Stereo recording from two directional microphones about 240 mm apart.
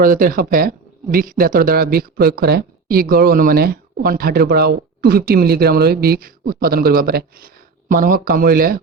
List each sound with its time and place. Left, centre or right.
0.0 s a man's voice: right